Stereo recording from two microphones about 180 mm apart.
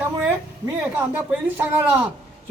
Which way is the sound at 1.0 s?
10° right (ahead or behind).